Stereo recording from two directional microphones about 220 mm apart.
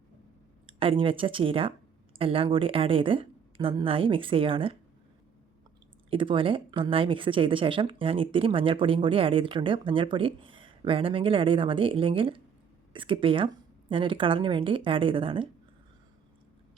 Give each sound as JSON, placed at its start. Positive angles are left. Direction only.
{"t": 0.7, "sound": "speech", "side_deg": -25}
{"t": 6.1, "sound": "speech", "side_deg": -25}